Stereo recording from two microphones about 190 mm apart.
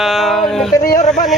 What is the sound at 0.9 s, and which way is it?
Speech, 45° left (ahead or behind).